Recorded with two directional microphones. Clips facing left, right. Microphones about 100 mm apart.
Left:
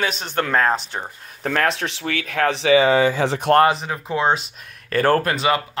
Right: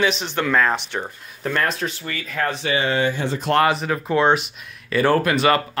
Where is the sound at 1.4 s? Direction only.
70° left (ahead or behind).